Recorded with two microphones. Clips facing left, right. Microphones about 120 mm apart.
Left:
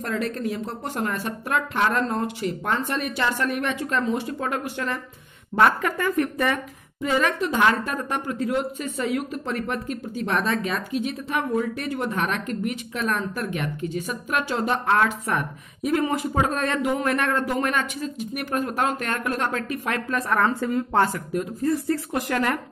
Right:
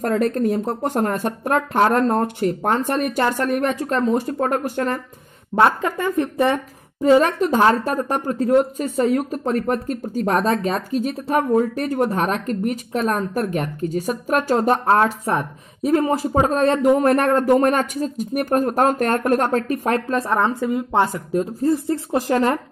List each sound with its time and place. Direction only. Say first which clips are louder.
0.0 s speech: right 8 dB; 45° right (ahead or behind)
5.6 s a woman's voice: right 3 dB; 25° right (ahead or behind)
21.3 s a woman's voice: right 5 dB; 30° right (ahead or behind)